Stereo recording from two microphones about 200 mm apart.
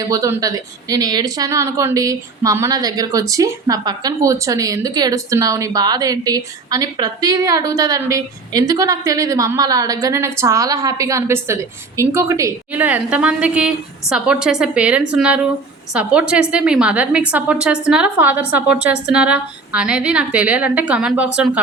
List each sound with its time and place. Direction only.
0.0 s a woman's voice: 15° right (ahead or behind)